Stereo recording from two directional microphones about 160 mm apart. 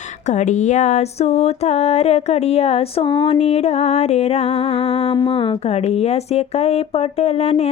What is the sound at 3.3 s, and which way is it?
Music, 40° left (ahead or behind).